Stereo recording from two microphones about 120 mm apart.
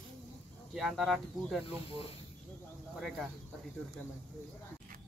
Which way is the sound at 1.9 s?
55° left (ahead or behind).